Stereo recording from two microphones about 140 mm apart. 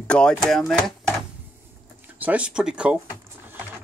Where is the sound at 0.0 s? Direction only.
10° left (ahead or behind).